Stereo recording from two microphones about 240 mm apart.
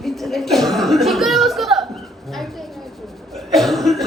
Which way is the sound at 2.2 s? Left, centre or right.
Centre.